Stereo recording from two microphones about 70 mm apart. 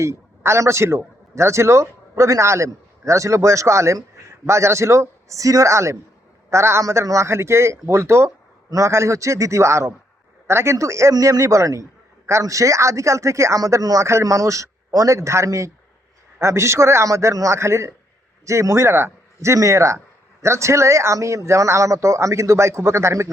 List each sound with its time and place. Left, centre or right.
0.0 s a man's voice: right
11.1 s a man's voice: right